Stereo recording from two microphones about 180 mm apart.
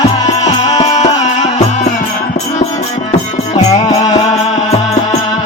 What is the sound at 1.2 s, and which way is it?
Music, 40° left (ahead or behind).